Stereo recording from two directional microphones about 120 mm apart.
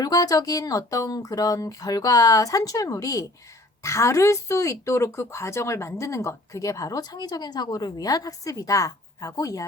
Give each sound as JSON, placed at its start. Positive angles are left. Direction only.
{"t": 0.0, "sound": "speech", "side_deg": 30}